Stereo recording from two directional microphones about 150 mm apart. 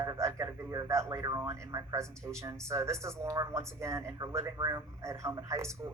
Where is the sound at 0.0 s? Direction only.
20° right (ahead or behind).